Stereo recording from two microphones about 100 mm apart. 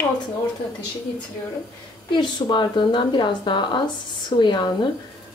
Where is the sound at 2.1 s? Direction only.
50° left (ahead or behind).